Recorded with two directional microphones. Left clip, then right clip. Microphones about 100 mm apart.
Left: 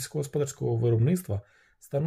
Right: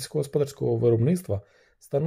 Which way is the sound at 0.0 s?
35° right (ahead or behind).